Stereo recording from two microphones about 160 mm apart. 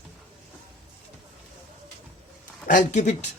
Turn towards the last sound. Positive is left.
turn(degrees=50)  # may be behind; listen again after turning